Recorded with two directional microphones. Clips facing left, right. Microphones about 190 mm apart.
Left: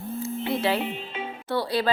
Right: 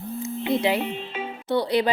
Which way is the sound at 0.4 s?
15° right (ahead or behind).